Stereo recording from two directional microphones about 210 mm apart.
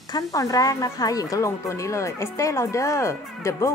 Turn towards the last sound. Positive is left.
turn(degrees=15)  # may be behind; listen again after turning